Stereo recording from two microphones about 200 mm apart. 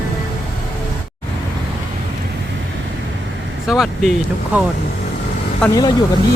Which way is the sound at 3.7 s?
Centre (ahead or behind).